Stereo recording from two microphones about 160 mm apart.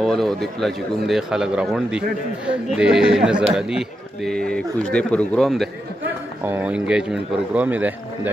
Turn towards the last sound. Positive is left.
turn(degrees=-10)  # may be behind; listen again after turning